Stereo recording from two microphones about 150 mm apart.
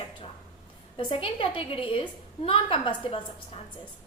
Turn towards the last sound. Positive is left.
turn(degrees=35)  # may be behind; listen again after turning